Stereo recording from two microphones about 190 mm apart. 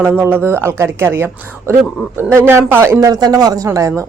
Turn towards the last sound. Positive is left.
turn(degrees=-15)  # may be behind; listen again after turning